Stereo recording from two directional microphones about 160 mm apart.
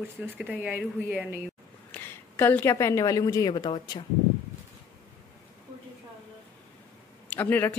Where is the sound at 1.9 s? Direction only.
15° left (ahead or behind).